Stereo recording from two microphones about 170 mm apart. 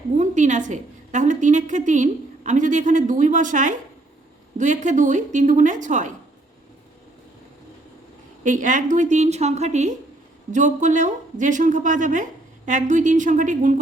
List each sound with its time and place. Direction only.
0.2 s a woman's voice: 45° right (ahead or behind)
8.4 s a woman's voice: 50° right (ahead or behind)